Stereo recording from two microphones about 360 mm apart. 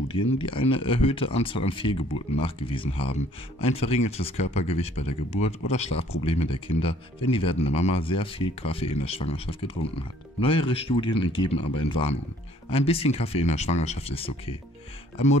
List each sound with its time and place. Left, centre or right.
0.3 s speech: centre